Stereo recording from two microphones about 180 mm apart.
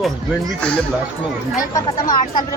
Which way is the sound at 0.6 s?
5° left (ahead or behind).